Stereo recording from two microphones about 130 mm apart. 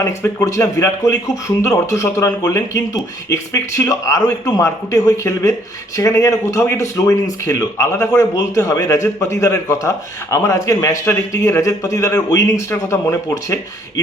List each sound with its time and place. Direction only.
0.0 s a man's voice: 25° left (ahead or behind)